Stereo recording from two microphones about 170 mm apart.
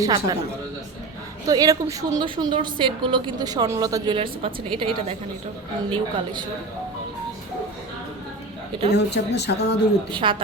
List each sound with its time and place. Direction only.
0.0 s a woman's voice: 25° right (ahead or behind)
1.5 s a woman's voice: 20° right (ahead or behind)
8.9 s speech: 80° left
10.1 s a woman's voice: 30° right (ahead or behind)